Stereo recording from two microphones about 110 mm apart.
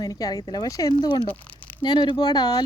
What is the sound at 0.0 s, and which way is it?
Speech, 35° left (ahead or behind).